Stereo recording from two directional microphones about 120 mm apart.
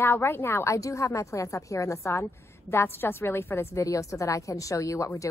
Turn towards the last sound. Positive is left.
turn(degrees=25)  # may be behind; listen again after turning